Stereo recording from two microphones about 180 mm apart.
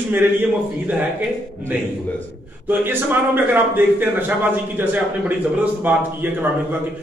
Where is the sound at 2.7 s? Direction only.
10° right (ahead or behind).